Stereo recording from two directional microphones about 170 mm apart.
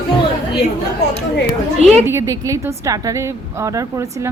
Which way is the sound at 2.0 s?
15° right (ahead or behind).